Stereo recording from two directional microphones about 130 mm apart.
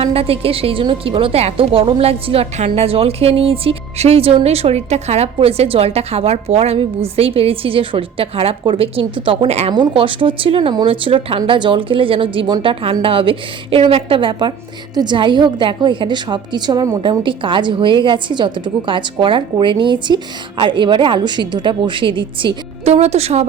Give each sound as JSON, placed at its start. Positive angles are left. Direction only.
{"t": 0.0, "sound": "speech", "side_deg": -50}
{"t": 9.7, "sound": "a woman's voice", "side_deg": -40}
{"t": 17.0, "sound": "a woman's voice", "side_deg": -40}
{"t": 22.8, "sound": "a woman's voice", "side_deg": -55}